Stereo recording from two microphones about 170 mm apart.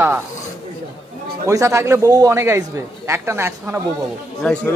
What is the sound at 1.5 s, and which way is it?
A man's voice, 20° right (ahead or behind).